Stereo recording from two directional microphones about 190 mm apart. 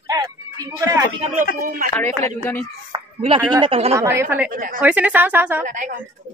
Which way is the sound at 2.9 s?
25° right (ahead or behind).